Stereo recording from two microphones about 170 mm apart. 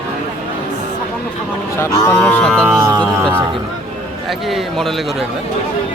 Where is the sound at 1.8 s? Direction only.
10° left (ahead or behind).